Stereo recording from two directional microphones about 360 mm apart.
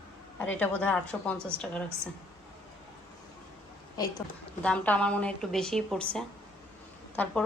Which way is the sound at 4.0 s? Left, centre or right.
Centre.